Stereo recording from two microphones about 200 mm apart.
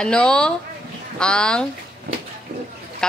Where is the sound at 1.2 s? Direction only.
5° left (ahead or behind).